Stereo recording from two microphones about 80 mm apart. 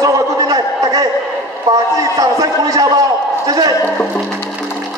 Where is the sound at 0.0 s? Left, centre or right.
Right.